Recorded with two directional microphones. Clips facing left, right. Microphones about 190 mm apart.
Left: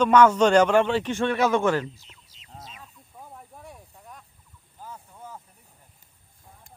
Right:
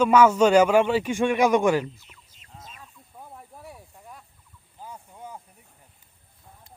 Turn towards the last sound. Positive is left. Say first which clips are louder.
# right 1 dB
turn(degrees=-15)  # may be behind; listen again after turning